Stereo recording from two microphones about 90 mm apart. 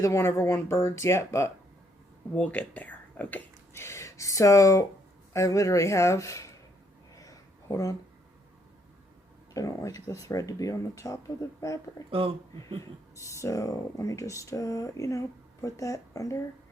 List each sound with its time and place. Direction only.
0.0 s speech: 30° left (ahead or behind)
2.3 s speech: 15° left (ahead or behind)
3.8 s speech: 35° left (ahead or behind)
7.2 s a sound: 40° left (ahead or behind)
9.6 s speech: 40° left (ahead or behind)
13.1 s speech: 35° left (ahead or behind)